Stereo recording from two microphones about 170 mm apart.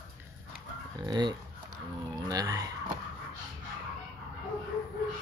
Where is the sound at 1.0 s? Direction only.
25° right (ahead or behind).